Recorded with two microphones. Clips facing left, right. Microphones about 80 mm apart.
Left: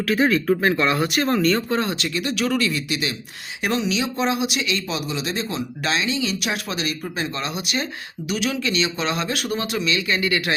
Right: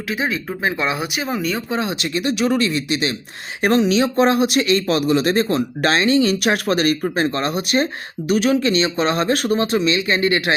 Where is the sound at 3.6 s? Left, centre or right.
Right.